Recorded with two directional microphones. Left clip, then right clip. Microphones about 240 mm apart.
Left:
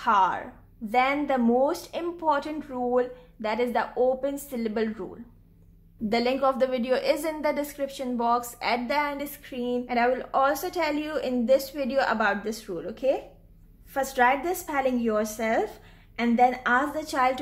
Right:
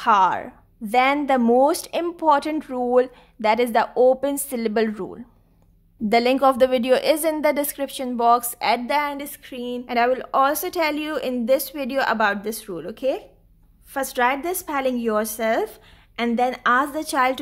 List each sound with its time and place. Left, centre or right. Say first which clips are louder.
0.0 s a woman's voice: right 5 dB; right